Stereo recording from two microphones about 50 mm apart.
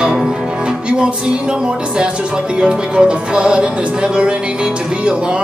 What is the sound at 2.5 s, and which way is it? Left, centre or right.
Music, centre.